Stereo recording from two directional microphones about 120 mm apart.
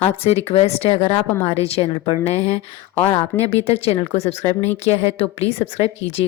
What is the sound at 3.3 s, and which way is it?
Speech, 25° left (ahead or behind).